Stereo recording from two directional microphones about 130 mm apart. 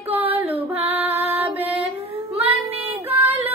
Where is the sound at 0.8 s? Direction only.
15° right (ahead or behind).